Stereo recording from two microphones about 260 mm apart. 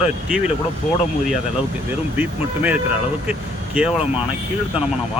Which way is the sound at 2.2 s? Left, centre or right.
Centre.